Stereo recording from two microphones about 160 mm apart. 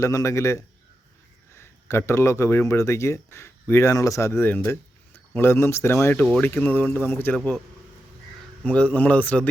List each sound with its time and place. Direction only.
0.0 s a man's voice: 20° left (ahead or behind)
8.6 s speech: 10° left (ahead or behind)